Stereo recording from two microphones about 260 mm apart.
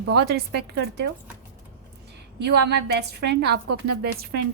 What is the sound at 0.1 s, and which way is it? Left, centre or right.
A woman's voice, right.